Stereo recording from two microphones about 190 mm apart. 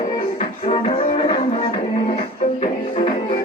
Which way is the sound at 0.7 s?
30° left (ahead or behind).